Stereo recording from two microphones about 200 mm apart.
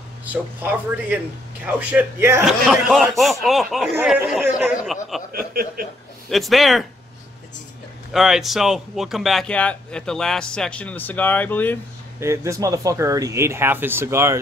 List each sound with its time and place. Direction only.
0.2 s speech: 10° right (ahead or behind)
2.6 s speech: centre (ahead or behind)
5.3 s speech: 45° right (ahead or behind)
6.2 s speech: centre (ahead or behind)
8.1 s speech: centre (ahead or behind)
12.2 s speech: 15° right (ahead or behind)